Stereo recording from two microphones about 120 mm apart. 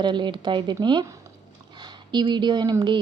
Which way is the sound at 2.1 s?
40° right (ahead or behind).